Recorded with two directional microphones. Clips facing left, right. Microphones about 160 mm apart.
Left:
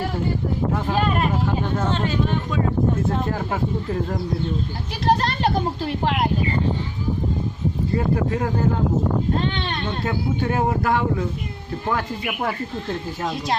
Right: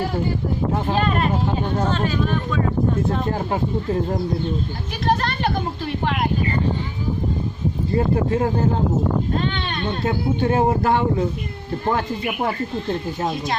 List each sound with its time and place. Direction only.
0.9 s speech: 10° left (ahead or behind)
1.9 s speech: 25° left (ahead or behind)
3.2 s a man's voice: 25° right (ahead or behind)
5.0 s speech: 30° left (ahead or behind)
7.9 s a man's voice: 25° right (ahead or behind)
9.4 s speech: 30° left (ahead or behind)
10.1 s a man's voice: 25° right (ahead or behind)